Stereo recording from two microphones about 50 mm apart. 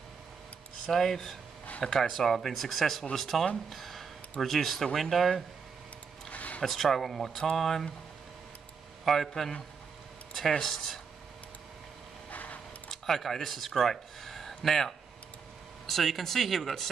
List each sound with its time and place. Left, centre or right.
0.8 s speech: centre
3.7 s a sound: centre
4.9 s speech: centre
6.3 s a sound: left
6.6 s speech: centre
9.0 s speech: centre
10.6 s speech: centre
12.3 s a sound: left
12.9 s speech: centre